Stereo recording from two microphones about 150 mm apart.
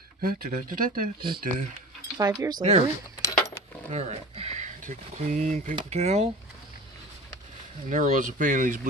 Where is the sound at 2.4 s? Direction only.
15° right (ahead or behind).